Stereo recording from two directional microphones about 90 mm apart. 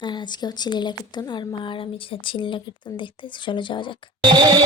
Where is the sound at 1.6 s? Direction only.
75° left (ahead or behind).